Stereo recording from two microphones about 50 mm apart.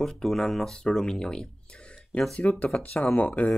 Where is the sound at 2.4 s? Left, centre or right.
Left.